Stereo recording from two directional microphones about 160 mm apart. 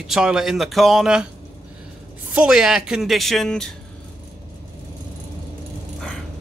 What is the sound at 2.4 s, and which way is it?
Speech, 5° right (ahead or behind).